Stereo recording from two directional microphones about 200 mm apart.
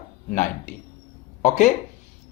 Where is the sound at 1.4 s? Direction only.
35° left (ahead or behind).